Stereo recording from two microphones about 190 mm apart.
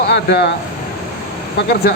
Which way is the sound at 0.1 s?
60° left (ahead or behind).